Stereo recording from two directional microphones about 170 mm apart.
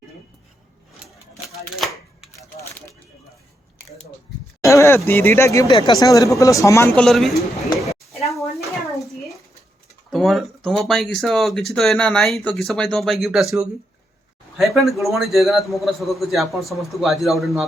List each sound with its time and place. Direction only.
4.6 s speech: 15° left (ahead or behind)
6.9 s speech: 5° left (ahead or behind)
10.1 s speech: centre (ahead or behind)